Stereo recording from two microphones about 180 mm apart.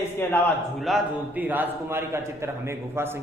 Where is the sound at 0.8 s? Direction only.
Centre (ahead or behind).